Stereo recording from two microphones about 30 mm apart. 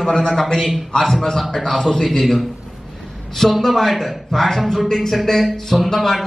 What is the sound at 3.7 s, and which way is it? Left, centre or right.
A man's voice, centre.